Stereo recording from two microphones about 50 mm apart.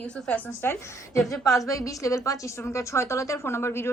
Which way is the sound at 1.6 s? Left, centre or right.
Left.